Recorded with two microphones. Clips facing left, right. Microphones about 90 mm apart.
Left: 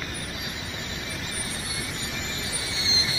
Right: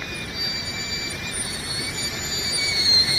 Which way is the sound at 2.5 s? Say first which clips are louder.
Right 3 dB; 40° left (ahead or behind).